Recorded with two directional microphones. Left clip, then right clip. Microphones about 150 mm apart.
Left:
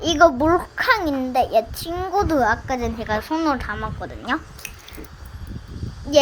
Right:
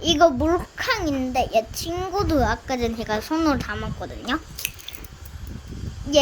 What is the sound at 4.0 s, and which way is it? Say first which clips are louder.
Speech: left 1 dB; 10° right (ahead or behind).